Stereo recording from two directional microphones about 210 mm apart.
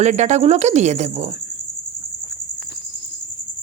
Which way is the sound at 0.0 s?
35° right (ahead or behind).